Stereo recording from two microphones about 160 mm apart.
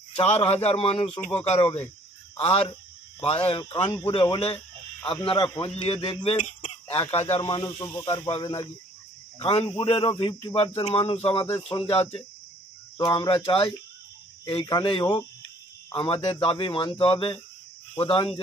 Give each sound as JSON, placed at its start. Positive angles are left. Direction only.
{"t": 0.1, "sound": "speech", "side_deg": 40}
{"t": 6.3, "sound": "chicken", "side_deg": 50}
{"t": 7.1, "sound": "speech", "side_deg": 40}
{"t": 7.4, "sound": "speech", "side_deg": 25}
{"t": 9.4, "sound": "speech", "side_deg": 40}
{"t": 11.4, "sound": "speech", "side_deg": 15}
{"t": 11.8, "sound": "speech", "side_deg": 40}
{"t": 12.9, "sound": "speech", "side_deg": 25}